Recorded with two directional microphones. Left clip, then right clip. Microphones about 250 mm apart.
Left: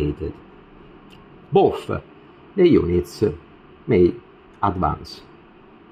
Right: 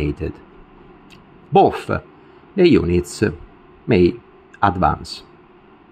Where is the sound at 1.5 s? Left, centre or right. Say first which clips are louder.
Right 3 dB; centre.